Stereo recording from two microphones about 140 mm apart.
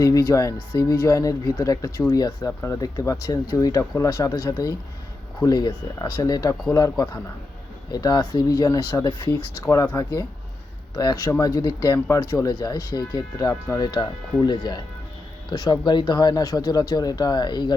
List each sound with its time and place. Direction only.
0.0 s speech: 25° left (ahead or behind)
7.9 s speech: 30° left (ahead or behind)